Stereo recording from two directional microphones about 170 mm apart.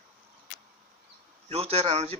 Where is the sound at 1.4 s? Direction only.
35° right (ahead or behind).